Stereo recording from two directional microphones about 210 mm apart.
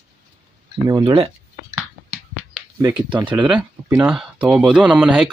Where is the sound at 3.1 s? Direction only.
20° right (ahead or behind).